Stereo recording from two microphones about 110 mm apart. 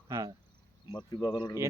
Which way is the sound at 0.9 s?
40° left (ahead or behind).